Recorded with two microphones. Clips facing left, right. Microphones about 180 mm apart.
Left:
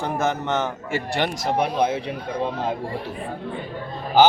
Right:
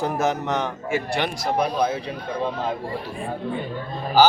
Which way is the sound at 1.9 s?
25° left (ahead or behind).